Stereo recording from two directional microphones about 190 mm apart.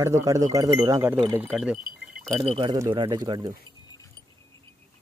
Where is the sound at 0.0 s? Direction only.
15° right (ahead or behind).